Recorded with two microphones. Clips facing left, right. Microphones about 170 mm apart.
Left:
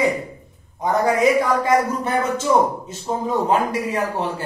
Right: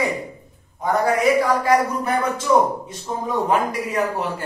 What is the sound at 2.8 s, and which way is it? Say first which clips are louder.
Speech: left 3 dB; 25° left (ahead or behind).